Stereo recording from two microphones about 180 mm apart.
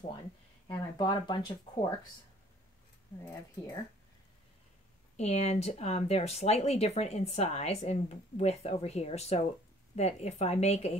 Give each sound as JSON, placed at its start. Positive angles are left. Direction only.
{"t": 0.7, "sound": "speech", "side_deg": 25}
{"t": 5.1, "sound": "speech", "side_deg": 35}